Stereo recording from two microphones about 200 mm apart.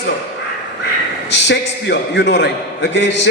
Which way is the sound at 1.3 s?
60° left (ahead or behind).